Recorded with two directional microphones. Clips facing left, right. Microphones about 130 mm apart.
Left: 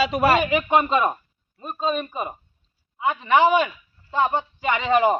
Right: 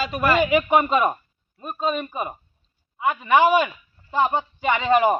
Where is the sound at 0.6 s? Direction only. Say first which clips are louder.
Right 1 dB; 15° right (ahead or behind).